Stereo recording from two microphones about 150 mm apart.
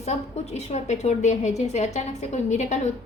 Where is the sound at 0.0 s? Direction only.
45° left (ahead or behind).